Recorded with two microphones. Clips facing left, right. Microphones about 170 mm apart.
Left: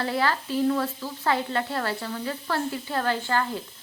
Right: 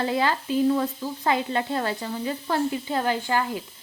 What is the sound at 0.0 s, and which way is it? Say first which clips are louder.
A woman's voice: right 2 dB; 20° right (ahead or behind).